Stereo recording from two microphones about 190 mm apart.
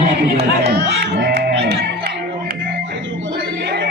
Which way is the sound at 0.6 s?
60° right (ahead or behind).